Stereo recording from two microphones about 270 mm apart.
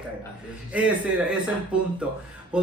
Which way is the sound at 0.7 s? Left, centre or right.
Centre.